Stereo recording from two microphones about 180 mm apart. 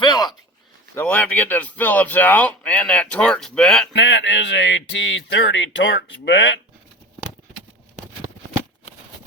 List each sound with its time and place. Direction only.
0.0 s a sound: 25° left (ahead or behind)
0.9 s speech: 10° left (ahead or behind)
3.9 s speech: 85° left